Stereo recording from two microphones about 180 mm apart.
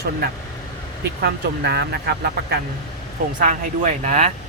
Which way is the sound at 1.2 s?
65° right (ahead or behind).